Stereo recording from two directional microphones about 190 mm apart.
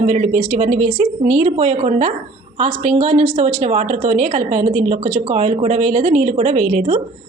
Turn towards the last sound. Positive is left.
turn(degrees=-35)  # may be behind; listen again after turning